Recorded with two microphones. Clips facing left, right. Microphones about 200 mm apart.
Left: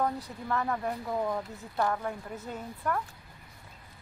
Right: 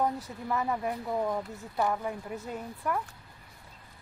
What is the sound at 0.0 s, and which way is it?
Speech, 10° right (ahead or behind).